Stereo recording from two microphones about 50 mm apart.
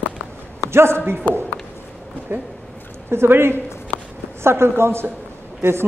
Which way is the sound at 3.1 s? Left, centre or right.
Right.